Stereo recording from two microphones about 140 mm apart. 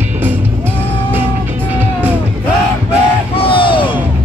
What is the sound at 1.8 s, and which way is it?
Music, 10° right (ahead or behind).